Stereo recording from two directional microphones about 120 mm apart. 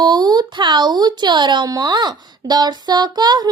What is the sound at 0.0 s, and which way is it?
Speech, 35° right (ahead or behind).